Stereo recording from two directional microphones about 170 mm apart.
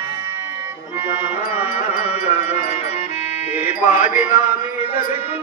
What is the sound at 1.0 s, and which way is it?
Music, 10° right (ahead or behind).